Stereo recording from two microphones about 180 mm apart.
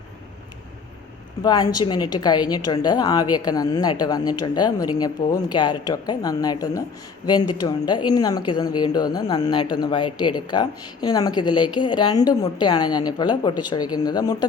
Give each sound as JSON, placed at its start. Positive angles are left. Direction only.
{"t": 1.4, "sound": "speech", "side_deg": 20}